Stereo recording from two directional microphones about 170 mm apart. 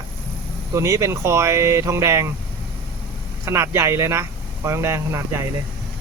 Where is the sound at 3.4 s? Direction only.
15° right (ahead or behind).